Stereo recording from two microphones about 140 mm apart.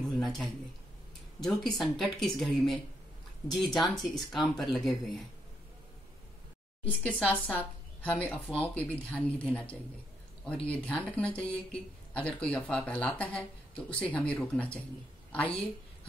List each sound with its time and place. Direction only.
0.0 s a sound: centre (ahead or behind)
1.4 s speech: centre (ahead or behind)
6.8 s a woman's voice: 10° left (ahead or behind)